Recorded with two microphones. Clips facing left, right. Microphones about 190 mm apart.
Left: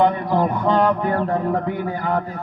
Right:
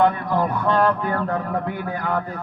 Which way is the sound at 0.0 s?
20° left (ahead or behind).